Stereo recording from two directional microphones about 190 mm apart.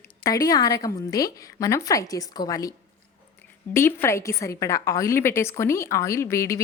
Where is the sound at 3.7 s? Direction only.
10° left (ahead or behind).